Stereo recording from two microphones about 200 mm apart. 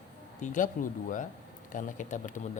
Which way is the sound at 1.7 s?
40° left (ahead or behind).